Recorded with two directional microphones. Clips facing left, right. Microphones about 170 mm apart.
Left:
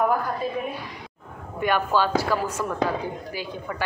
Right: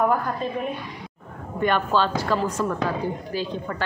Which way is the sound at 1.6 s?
10° left (ahead or behind).